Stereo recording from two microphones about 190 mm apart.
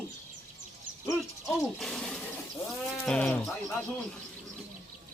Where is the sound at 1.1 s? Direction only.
Centre (ahead or behind).